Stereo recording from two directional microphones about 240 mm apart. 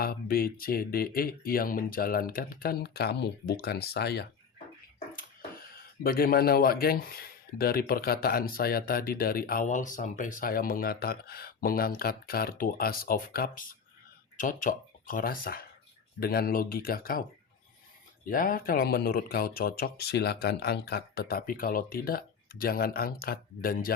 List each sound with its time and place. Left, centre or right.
0.0 s speech: left
18.3 s speech: left